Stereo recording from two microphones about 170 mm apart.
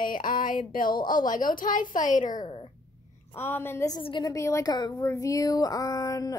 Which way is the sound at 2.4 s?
30° left (ahead or behind).